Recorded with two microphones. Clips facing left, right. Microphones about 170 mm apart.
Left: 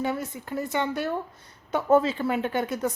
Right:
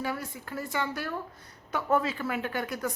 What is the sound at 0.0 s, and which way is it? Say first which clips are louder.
A woman's voice: left 5 dB; 20° left (ahead or behind).